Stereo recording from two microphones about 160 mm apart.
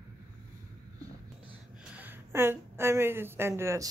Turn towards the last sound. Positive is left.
turn(degrees=-20)  # may be behind; listen again after turning